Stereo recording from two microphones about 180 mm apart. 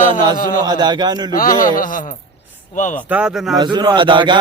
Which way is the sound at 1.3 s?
50° left (ahead or behind).